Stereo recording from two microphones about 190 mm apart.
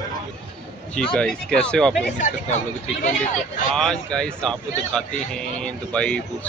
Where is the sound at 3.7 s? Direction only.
5° left (ahead or behind).